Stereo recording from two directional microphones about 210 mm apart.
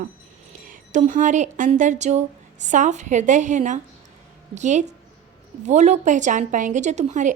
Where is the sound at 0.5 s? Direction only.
40° right (ahead or behind).